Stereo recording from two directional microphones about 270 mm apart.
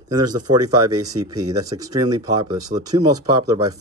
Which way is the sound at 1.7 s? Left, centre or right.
Centre.